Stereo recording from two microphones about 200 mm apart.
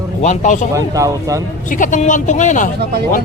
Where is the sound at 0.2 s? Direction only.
40° left (ahead or behind).